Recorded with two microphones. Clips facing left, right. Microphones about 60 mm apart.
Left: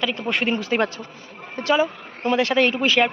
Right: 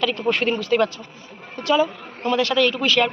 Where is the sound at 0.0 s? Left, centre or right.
Centre.